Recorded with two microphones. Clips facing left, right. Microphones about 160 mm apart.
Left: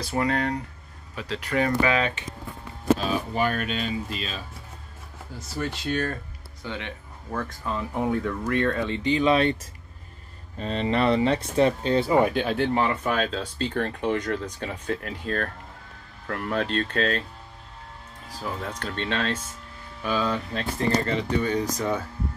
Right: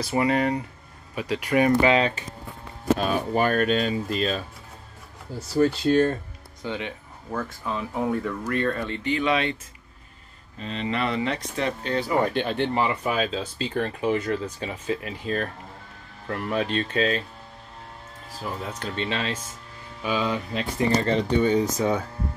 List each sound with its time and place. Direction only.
0.0 s speech: 5° right (ahead or behind)
1.8 s speech: 30° right (ahead or behind)
3.0 s speech: 50° right (ahead or behind)
5.6 s speech: 35° right (ahead or behind)
6.6 s speech: 15° right (ahead or behind)
7.2 s speech: 5° right (ahead or behind)
8.8 s speech: 20° left (ahead or behind); by 9.6 s 40° left (ahead or behind)
10.6 s speech: 40° left (ahead or behind); by 12.2 s 25° left (ahead or behind)
12.2 s speech: 5° left (ahead or behind)
18.4 s speech: 5° right (ahead or behind)
21.1 s speech: 25° right (ahead or behind)